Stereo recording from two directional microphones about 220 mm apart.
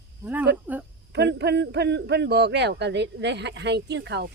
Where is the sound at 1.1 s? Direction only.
50° right (ahead or behind).